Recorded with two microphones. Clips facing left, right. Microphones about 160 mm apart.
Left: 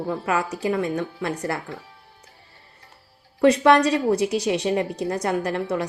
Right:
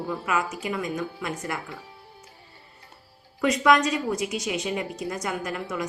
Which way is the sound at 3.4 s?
30° left (ahead or behind).